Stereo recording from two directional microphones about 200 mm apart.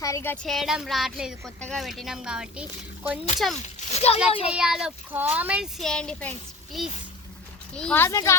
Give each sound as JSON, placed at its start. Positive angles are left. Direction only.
{"t": 0.0, "sound": "speech", "side_deg": 15}
{"t": 3.8, "sound": "a sound", "side_deg": 30}
{"t": 4.4, "sound": "speech", "side_deg": -5}